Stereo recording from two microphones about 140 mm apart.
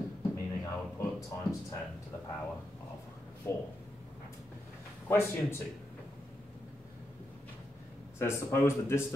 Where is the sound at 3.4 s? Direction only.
15° left (ahead or behind).